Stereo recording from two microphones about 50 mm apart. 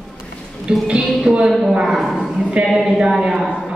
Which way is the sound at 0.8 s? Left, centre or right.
Centre.